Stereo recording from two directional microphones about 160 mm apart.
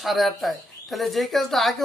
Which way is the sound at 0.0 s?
Centre (ahead or behind).